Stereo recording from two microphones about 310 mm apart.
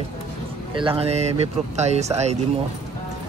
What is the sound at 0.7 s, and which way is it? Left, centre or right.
Speech, centre.